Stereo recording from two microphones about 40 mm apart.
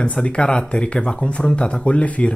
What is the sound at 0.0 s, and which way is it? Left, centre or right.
Speech, left.